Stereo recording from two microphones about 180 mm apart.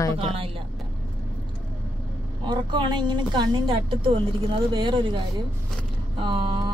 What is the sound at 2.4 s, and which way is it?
A woman's voice, 25° right (ahead or behind).